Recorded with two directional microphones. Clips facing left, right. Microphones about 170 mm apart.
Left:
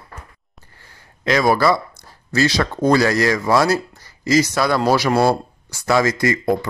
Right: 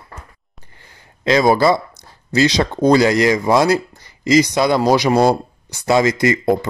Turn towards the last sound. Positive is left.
turn(degrees=-20)  # may be behind; listen again after turning